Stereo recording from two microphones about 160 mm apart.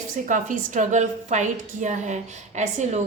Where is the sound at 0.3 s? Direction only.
55° right (ahead or behind).